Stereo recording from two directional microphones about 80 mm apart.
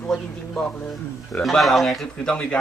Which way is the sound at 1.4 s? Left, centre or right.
Centre.